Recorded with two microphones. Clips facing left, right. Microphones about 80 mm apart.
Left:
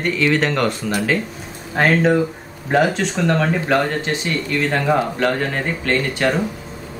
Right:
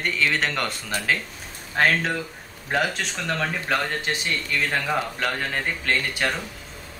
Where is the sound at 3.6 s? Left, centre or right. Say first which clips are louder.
Left 7 dB; centre.